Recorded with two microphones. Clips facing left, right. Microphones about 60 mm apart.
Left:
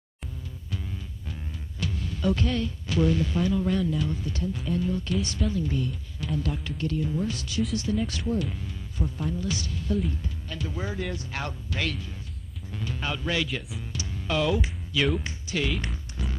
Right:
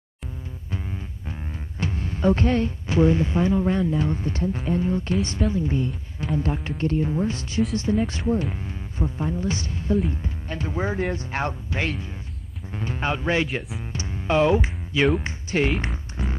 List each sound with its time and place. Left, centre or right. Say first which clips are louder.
0.7 s music: right 4 dB; right
1.8 s speech: right 5 dB; right
13.9 s music: right 7 dB; right
15.1 s speech: right 6 dB; right
15.8 s music: right 5 dB; right